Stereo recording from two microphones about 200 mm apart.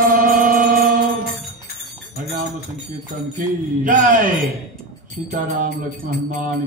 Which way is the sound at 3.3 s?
40° right (ahead or behind).